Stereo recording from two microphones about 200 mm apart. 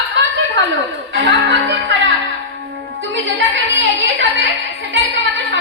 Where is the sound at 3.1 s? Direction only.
70° right (ahead or behind).